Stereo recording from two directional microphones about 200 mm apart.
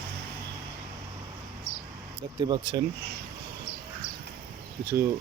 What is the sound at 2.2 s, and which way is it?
Speech, 25° right (ahead or behind).